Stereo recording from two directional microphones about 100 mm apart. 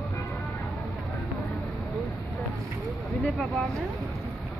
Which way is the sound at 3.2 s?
5° left (ahead or behind).